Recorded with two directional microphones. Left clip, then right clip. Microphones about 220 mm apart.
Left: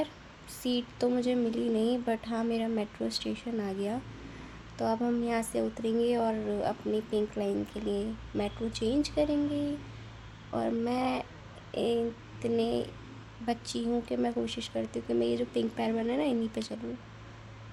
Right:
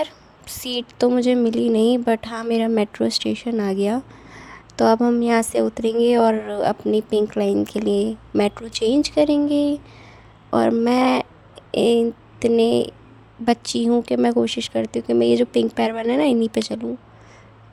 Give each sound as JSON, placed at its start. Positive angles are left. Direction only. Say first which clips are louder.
{"t": 0.0, "sound": "a woman's voice", "louder": "right 10 dB", "side_deg": -40}